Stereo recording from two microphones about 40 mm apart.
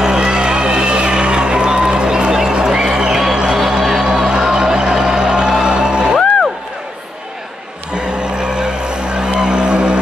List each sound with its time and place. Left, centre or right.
0.0 s vehicle: centre
2.5 s music: centre
7.9 s a sound: right